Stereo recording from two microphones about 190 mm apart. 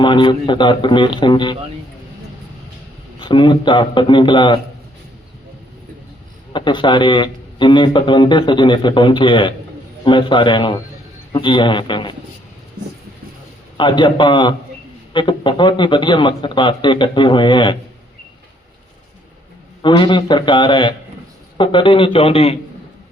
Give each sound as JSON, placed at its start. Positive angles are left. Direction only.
{"t": 0.0, "sound": "speech", "side_deg": 25}
{"t": 3.2, "sound": "speech", "side_deg": 25}
{"t": 6.5, "sound": "speech", "side_deg": 25}
{"t": 13.7, "sound": "speech", "side_deg": 25}
{"t": 19.8, "sound": "speech", "side_deg": 25}